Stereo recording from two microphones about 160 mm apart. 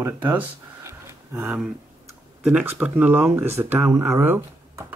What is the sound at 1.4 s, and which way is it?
Speech, 5° right (ahead or behind).